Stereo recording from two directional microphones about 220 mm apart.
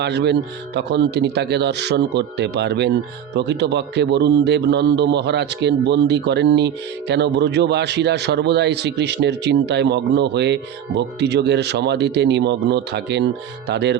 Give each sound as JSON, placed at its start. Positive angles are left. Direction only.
{"t": 0.0, "sound": "a man's voice", "side_deg": -50}